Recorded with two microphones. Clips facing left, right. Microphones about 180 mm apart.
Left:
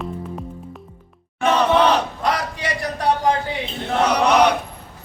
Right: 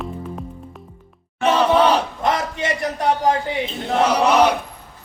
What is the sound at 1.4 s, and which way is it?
Crowd, 10° right (ahead or behind).